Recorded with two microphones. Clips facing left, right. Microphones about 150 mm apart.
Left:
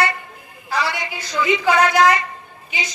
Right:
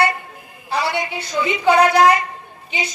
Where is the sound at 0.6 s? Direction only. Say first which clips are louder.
Right 2 dB; 30° right (ahead or behind).